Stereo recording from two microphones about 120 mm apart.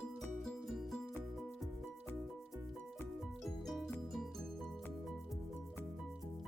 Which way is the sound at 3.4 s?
Centre (ahead or behind).